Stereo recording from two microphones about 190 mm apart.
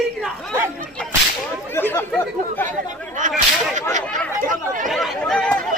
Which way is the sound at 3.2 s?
40° right (ahead or behind).